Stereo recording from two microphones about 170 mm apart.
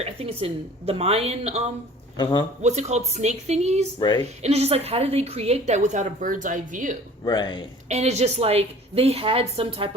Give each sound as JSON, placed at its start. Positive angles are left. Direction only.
{"t": 0.0, "sound": "a woman's voice", "side_deg": -35}
{"t": 2.1, "sound": "a man's voice", "side_deg": 25}
{"t": 2.6, "sound": "a woman's voice", "side_deg": -40}
{"t": 7.3, "sound": "a man's voice", "side_deg": 25}
{"t": 7.9, "sound": "a woman's voice", "side_deg": -40}